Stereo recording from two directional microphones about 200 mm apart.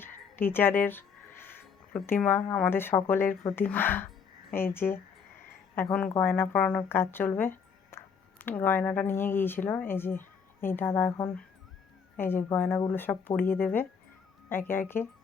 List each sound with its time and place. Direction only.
0.0 s a woman's voice: 10° left (ahead or behind)